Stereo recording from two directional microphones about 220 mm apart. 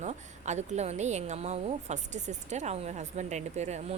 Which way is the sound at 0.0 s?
30° right (ahead or behind).